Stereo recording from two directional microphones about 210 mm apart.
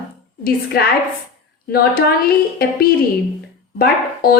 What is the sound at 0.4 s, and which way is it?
Speech, 45° left (ahead or behind).